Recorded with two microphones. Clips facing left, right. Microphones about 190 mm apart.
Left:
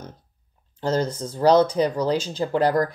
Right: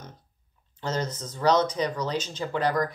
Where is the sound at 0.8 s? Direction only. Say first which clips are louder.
Left 7 dB; 30° left (ahead or behind).